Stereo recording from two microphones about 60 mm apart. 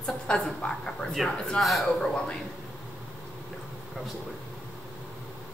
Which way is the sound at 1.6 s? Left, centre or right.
Centre.